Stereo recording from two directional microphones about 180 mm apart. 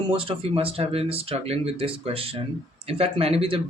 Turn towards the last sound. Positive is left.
turn(degrees=-30)  # may be behind; listen again after turning